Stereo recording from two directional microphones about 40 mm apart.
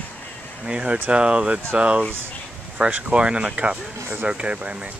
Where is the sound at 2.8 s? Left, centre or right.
Right.